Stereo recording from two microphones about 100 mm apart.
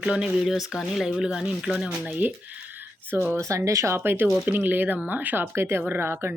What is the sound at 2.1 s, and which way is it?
Speech, 15° right (ahead or behind).